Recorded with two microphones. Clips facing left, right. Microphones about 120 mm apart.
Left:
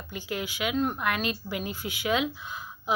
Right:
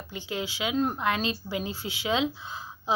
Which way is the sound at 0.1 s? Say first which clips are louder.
Even; 25° right (ahead or behind).